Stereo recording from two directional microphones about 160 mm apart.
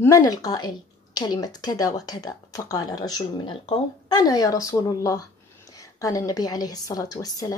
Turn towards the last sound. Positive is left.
turn(degrees=20)  # may be behind; listen again after turning